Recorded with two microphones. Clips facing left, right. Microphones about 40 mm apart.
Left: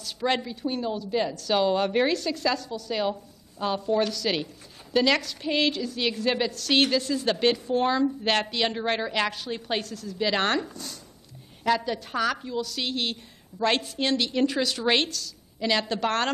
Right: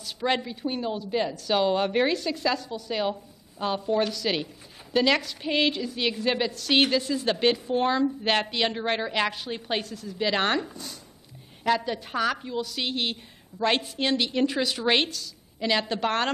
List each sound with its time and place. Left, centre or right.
0.0 s a woman's voice: centre
10.2 s a woman's voice: centre